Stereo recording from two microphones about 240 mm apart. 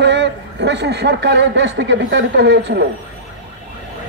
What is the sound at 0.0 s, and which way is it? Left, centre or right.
A man's voice, right.